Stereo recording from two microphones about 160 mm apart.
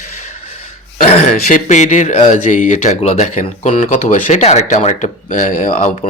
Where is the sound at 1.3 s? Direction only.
55° left (ahead or behind).